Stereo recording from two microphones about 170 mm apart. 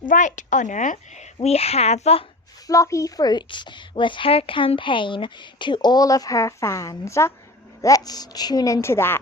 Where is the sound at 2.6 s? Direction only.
20° left (ahead or behind).